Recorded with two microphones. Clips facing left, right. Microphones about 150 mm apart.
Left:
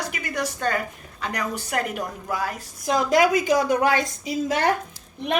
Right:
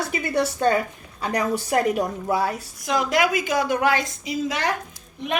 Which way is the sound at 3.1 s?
40° left (ahead or behind).